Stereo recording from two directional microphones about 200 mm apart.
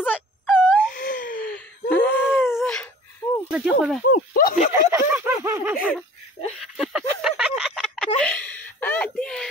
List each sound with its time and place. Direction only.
0.6 s wail: 5° left (ahead or behind)
0.9 s wail: 45° left (ahead or behind)
1.5 s gasp: 10° left (ahead or behind)
2.4 s a sound: centre (ahead or behind)
3.5 s snake: 5° right (ahead or behind)
4.1 s speech: 45° left (ahead or behind)
4.9 s a sound: 10° right (ahead or behind)
8.2 s whimper: 10° left (ahead or behind)